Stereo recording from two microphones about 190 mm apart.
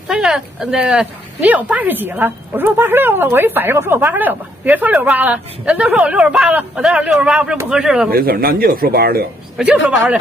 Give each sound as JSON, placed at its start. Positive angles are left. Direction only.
{"t": 0.1, "sound": "speech", "side_deg": -5}
{"t": 8.1, "sound": "speech", "side_deg": -50}
{"t": 9.6, "sound": "speech", "side_deg": -5}